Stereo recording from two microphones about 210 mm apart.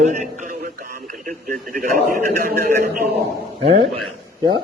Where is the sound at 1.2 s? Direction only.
40° right (ahead or behind).